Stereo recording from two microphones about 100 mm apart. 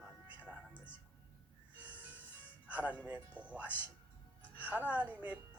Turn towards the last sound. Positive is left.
turn(degrees=-15)  # may be behind; listen again after turning